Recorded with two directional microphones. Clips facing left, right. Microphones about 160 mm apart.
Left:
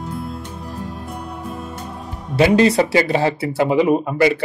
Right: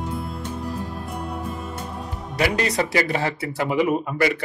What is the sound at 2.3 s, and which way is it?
Speech, 25° left (ahead or behind).